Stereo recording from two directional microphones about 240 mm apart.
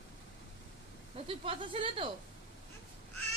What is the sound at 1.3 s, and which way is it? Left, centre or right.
Speech, right.